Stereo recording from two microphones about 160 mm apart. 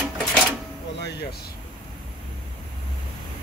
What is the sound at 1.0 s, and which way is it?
Music, 90° left.